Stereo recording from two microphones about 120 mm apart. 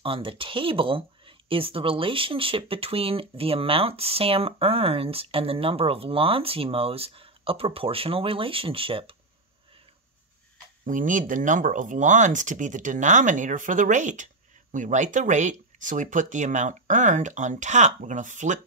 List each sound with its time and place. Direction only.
0.0 s speech: 50° right (ahead or behind)
10.9 s speech: 90° right